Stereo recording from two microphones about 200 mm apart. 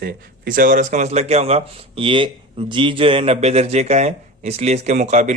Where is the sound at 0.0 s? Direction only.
45° right (ahead or behind).